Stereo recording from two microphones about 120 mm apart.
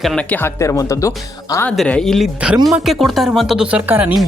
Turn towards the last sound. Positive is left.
turn(degrees=-15)  # may be behind; listen again after turning